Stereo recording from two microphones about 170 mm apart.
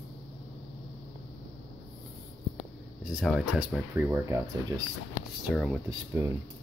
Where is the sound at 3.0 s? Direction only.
5° right (ahead or behind); by 4.8 s 20° right (ahead or behind).